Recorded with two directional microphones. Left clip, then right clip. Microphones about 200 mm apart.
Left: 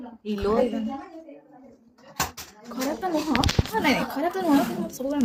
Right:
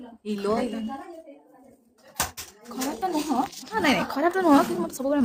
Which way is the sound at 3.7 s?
15° right (ahead or behind).